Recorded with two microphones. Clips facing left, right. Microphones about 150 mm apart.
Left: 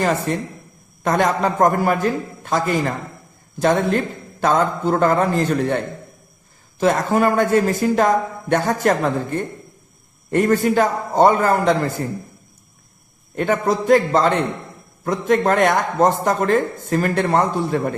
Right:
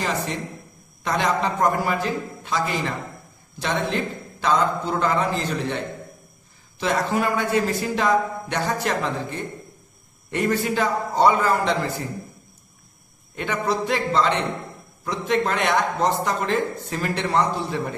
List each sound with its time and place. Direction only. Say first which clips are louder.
0.0 s a man's voice: left 6 dB; 50° left (ahead or behind)
13.3 s a man's voice: left 6 dB; 45° left (ahead or behind)